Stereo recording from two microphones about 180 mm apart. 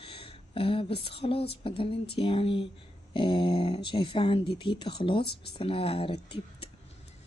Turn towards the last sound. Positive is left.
turn(degrees=30)  # may be behind; listen again after turning